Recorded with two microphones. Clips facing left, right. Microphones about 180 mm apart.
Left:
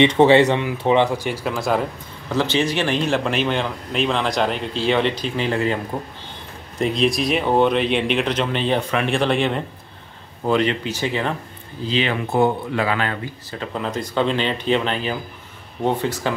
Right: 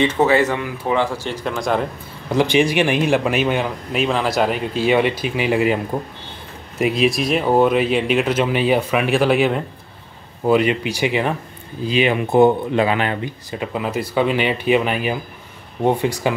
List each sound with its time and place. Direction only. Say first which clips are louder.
0.2 s speech: left 3 dB; 25° left (ahead or behind); by 1.9 s centre (ahead or behind)
2.2 s speech: right 4 dB; 15° right (ahead or behind)
6.8 s speech: right 2 dB; 5° right (ahead or behind)